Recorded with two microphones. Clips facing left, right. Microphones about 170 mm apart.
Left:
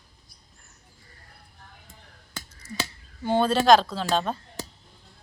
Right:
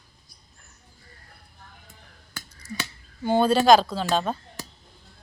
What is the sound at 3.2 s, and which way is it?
Speech, centre (ahead or behind).